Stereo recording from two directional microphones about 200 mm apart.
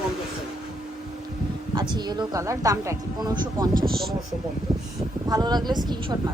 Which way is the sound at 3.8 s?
Centre (ahead or behind).